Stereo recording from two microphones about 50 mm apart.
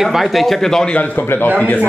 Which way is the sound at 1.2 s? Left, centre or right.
Left.